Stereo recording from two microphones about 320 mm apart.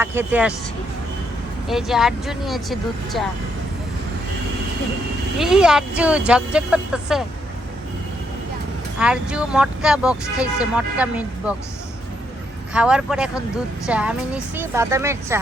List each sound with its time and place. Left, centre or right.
0.0 s a woman's voice: centre
1.6 s speech: centre
5.4 s speech: centre
9.0 s speech: centre
12.7 s a woman's voice: centre